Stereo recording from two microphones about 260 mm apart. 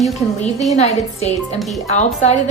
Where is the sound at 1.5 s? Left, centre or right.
Centre.